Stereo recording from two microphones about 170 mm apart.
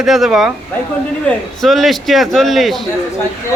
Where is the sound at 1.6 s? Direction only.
Centre (ahead or behind).